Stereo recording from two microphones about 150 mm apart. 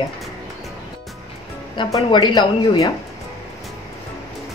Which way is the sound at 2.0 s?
30° left (ahead or behind).